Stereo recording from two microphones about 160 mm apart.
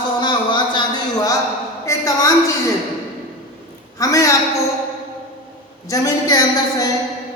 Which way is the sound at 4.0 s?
20° left (ahead or behind).